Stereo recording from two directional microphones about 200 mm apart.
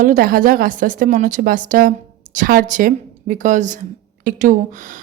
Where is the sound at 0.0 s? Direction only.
45° right (ahead or behind).